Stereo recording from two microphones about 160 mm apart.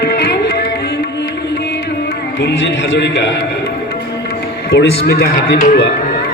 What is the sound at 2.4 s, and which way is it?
Music, 90° left.